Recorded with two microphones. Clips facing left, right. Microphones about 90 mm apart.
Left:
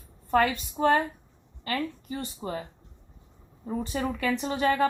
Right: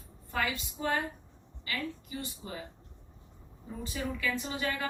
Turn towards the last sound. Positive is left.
turn(degrees=55)  # may be behind; listen again after turning